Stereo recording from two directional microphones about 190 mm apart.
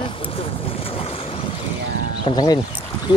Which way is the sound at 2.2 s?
20° left (ahead or behind).